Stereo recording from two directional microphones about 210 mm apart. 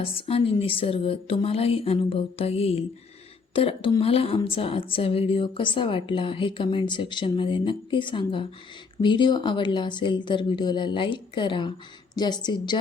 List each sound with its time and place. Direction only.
0.0 s a woman's voice: 25° left (ahead or behind)